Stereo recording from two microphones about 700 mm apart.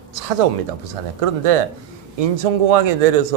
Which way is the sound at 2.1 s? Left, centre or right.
Right.